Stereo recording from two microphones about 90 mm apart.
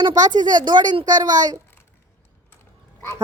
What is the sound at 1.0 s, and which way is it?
Speech, 45° right (ahead or behind).